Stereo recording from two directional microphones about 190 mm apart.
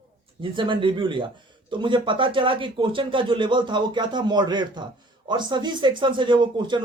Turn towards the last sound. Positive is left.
turn(degrees=-25)  # may be behind; listen again after turning